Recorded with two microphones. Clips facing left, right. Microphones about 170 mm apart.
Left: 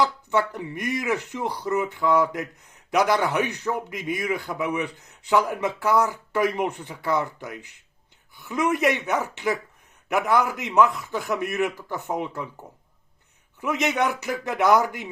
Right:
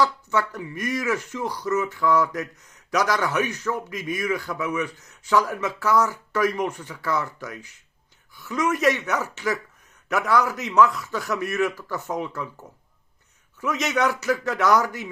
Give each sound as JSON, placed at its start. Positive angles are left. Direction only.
{"t": 0.0, "sound": "a man's voice", "side_deg": 20}
{"t": 13.6, "sound": "a man's voice", "side_deg": 20}